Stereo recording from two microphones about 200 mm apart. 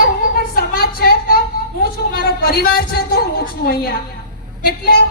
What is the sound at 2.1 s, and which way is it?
Speech, 50° left (ahead or behind).